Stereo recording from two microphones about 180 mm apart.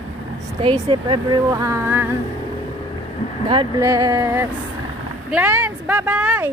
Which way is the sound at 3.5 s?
25° right (ahead or behind).